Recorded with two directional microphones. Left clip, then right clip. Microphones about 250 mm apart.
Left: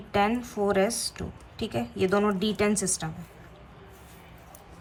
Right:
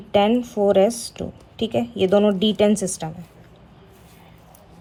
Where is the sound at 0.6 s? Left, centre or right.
Left.